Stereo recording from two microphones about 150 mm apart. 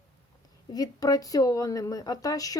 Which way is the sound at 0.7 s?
25° left (ahead or behind).